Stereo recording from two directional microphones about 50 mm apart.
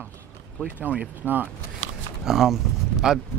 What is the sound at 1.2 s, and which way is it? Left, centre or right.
Speech, left.